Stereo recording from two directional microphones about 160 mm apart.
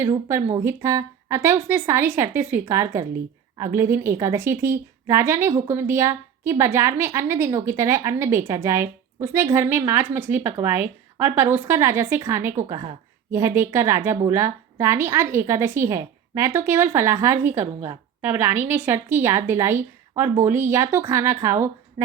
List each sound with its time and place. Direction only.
0.5 s a woman's voice: 20° right (ahead or behind)